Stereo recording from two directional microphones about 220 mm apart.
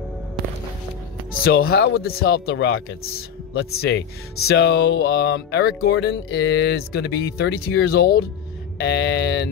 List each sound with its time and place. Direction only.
1.4 s speech: 45° left (ahead or behind)